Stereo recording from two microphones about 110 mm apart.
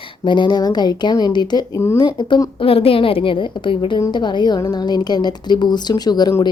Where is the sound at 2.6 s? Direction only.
60° left (ahead or behind).